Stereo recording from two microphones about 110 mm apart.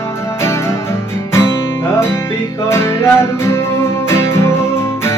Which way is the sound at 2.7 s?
25° left (ahead or behind).